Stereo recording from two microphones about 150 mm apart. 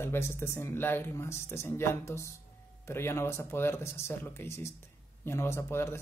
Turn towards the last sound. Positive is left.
turn(degrees=15)  # may be behind; listen again after turning